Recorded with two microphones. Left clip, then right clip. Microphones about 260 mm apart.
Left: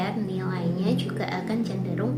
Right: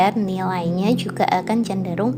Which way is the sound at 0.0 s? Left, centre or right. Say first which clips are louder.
Right 11 dB; right.